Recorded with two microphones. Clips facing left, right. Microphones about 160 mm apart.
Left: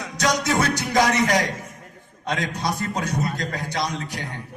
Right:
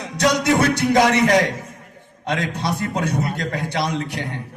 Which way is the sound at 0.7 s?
25° right (ahead or behind).